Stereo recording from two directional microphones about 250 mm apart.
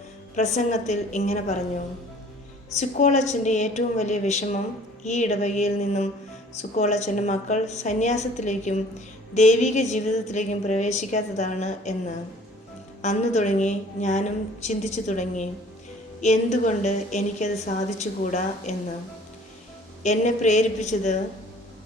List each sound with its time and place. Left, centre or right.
0.3 s a woman's voice: left
2.7 s a woman's voice: left
20.0 s a woman's voice: left